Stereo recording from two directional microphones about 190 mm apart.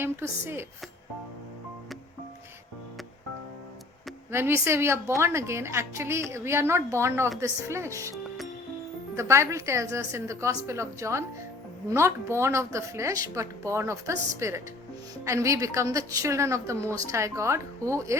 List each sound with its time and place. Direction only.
0.0 s a woman's voice: 10° right (ahead or behind)
4.3 s a woman's voice: 15° right (ahead or behind)
9.1 s a woman's voice: 15° right (ahead or behind)